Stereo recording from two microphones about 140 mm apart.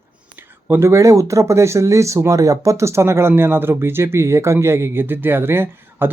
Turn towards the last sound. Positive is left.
turn(degrees=-15)  # may be behind; listen again after turning